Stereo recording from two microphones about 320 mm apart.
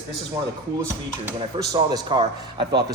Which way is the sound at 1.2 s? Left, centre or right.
Centre.